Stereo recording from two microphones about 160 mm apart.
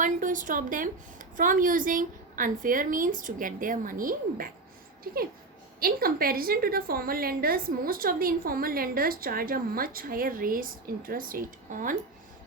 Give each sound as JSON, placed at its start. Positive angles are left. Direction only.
{"t": 0.0, "sound": "a woman's voice", "side_deg": -55}